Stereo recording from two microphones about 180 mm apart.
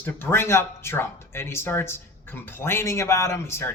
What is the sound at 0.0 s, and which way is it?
Speech, 15° left (ahead or behind).